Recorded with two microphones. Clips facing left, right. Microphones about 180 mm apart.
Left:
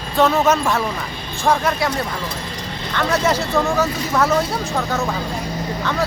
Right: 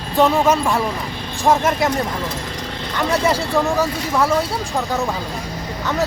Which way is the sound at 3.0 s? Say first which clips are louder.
Even; 10° right (ahead or behind).